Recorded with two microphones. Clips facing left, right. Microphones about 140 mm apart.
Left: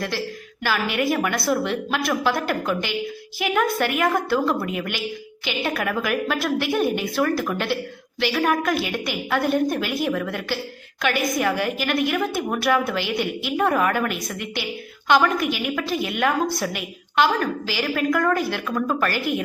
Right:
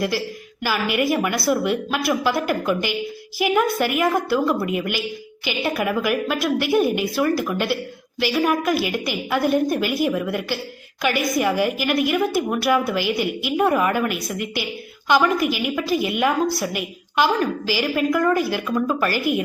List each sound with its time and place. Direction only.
0.6 s a woman's voice: 5° right (ahead or behind)